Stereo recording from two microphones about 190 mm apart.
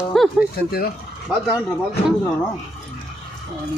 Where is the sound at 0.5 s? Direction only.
55° left (ahead or behind).